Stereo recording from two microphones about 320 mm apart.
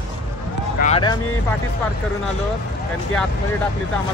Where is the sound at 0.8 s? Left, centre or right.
Centre.